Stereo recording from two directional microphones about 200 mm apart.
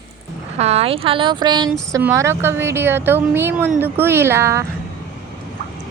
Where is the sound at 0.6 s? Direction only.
30° right (ahead or behind); by 4.6 s 15° right (ahead or behind).